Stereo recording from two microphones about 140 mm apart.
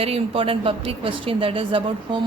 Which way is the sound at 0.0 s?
45° right (ahead or behind).